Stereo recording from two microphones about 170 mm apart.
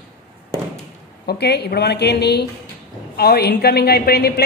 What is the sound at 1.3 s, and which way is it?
A woman's voice, 75° left (ahead or behind).